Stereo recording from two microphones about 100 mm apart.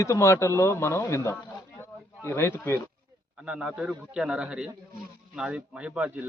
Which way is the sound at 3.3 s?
10° right (ahead or behind).